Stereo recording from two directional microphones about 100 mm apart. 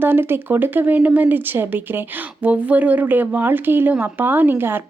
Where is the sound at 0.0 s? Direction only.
20° right (ahead or behind).